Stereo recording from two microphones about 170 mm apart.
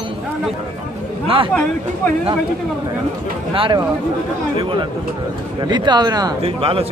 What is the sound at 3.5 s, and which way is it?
Speech, 30° right (ahead or behind).